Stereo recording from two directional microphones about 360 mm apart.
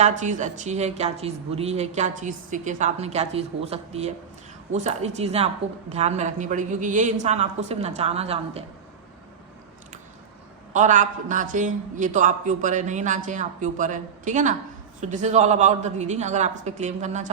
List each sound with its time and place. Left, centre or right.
0.0 s speech: centre
10.8 s speech: right